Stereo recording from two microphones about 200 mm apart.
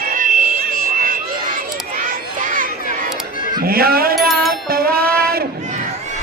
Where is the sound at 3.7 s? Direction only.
50° right (ahead or behind).